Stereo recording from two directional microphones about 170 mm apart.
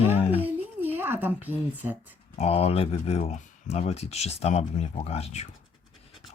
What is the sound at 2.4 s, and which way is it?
Speech, 35° left (ahead or behind).